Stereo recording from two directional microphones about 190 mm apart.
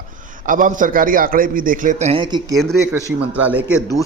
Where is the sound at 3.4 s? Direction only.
10° right (ahead or behind).